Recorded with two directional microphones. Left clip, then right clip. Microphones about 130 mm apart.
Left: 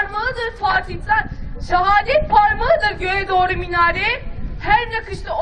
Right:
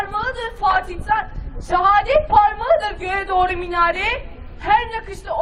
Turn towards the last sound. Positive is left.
turn(degrees=35)  # may be behind; listen again after turning